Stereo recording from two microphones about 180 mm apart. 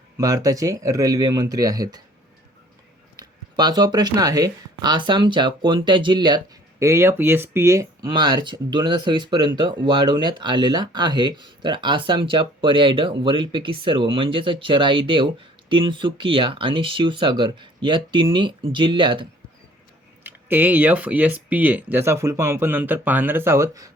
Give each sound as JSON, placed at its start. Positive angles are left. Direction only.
{"t": 0.2, "sound": "speech", "side_deg": -20}
{"t": 3.2, "sound": "speech", "side_deg": -20}
{"t": 20.2, "sound": "speech", "side_deg": -10}